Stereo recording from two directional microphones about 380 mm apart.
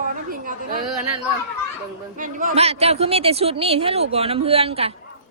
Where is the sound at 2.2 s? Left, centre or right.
Right.